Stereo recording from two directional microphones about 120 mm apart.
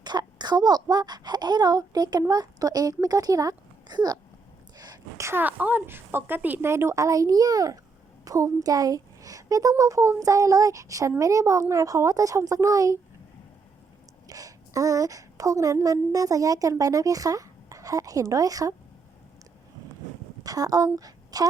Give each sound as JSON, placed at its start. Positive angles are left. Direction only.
{"t": 0.0, "sound": "a woman's voice", "side_deg": -35}
{"t": 14.3, "sound": "a woman's voice", "side_deg": -30}
{"t": 20.4, "sound": "a woman's voice", "side_deg": -30}